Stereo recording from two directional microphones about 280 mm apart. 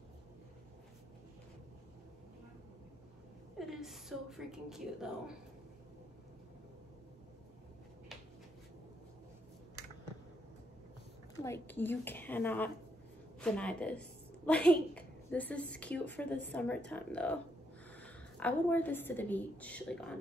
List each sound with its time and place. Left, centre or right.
3.5 s a woman's voice: centre
11.4 s a woman's voice: centre